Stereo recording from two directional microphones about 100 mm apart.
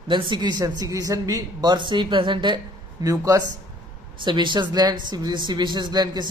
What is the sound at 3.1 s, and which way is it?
Speech, 35° right (ahead or behind).